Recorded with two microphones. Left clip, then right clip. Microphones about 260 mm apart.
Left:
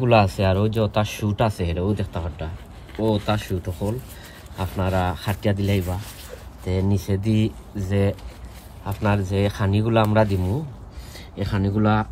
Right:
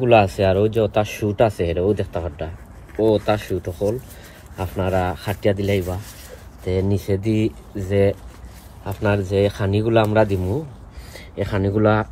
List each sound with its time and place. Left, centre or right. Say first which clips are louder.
0.0 s speech: right 3 dB; left
8.8 s speech: right 3 dB; left